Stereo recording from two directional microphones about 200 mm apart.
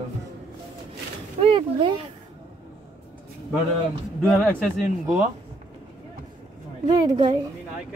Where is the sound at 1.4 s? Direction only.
25° right (ahead or behind).